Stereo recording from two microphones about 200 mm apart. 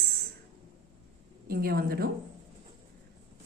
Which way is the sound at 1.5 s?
50° right (ahead or behind).